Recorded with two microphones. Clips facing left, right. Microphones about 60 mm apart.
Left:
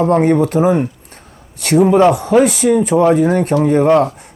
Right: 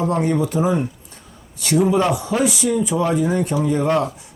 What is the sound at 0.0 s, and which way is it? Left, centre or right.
Speech, left.